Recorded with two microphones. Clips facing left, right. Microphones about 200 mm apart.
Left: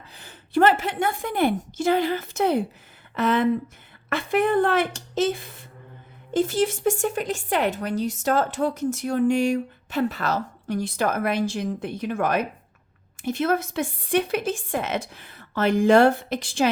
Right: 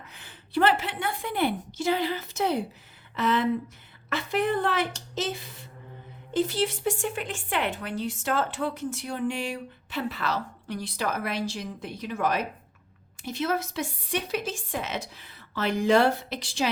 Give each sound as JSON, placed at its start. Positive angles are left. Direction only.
{"t": 0.1, "sound": "speech", "side_deg": 40}